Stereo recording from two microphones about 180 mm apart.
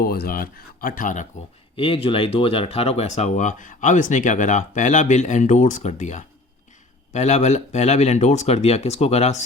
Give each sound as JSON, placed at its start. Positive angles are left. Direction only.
{"t": 0.0, "sound": "speech", "side_deg": 55}
{"t": 1.7, "sound": "speech", "side_deg": 30}